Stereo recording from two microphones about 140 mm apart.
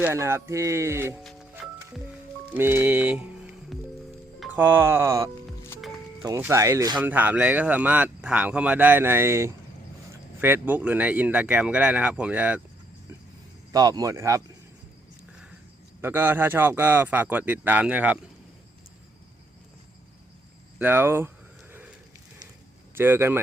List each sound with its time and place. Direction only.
0.0 s speech: 20° right (ahead or behind)
2.5 s speech: 15° right (ahead or behind)
7.0 s speech: 10° right (ahead or behind)
13.7 s speech: 25° right (ahead or behind)
16.0 s speech: 15° right (ahead or behind)
20.7 s speech: 15° right (ahead or behind)
21.7 s a sound: 15° right (ahead or behind)
23.0 s speech: 15° right (ahead or behind)